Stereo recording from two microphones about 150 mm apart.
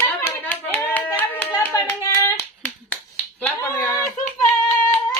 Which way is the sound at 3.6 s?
15° left (ahead or behind).